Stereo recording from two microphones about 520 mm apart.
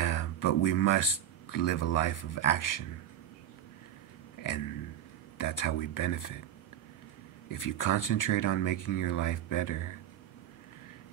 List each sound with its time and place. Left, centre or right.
0.0 s speech: left
5.4 s speech: left
7.4 s speech: left